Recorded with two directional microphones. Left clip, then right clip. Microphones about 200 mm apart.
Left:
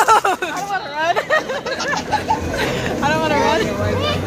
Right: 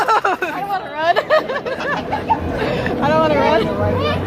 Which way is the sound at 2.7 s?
45° right (ahead or behind).